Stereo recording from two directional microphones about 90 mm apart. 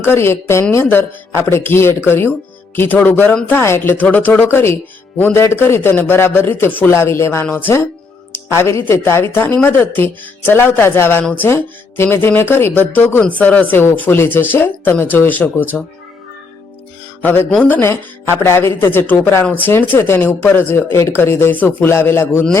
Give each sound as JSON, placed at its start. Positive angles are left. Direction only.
{"t": 0.0, "sound": "speech", "side_deg": 25}
{"t": 11.2, "sound": "speech", "side_deg": 15}
{"t": 11.4, "sound": "speech", "side_deg": 25}
{"t": 17.5, "sound": "speech", "side_deg": 15}
{"t": 21.8, "sound": "speech", "side_deg": 30}